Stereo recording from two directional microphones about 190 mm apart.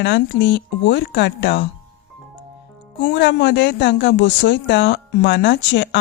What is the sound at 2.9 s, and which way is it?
Speech, 65° left (ahead or behind).